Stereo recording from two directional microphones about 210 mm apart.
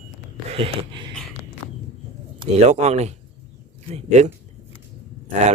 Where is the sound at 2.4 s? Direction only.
30° right (ahead or behind).